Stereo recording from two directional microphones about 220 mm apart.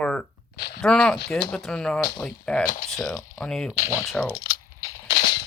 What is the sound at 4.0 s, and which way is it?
Speech, centre (ahead or behind).